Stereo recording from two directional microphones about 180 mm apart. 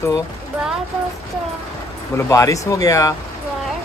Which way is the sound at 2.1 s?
15° left (ahead or behind).